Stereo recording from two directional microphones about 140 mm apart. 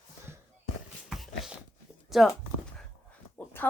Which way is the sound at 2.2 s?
Centre (ahead or behind).